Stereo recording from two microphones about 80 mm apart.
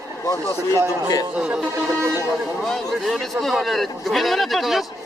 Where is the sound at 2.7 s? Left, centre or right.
Centre.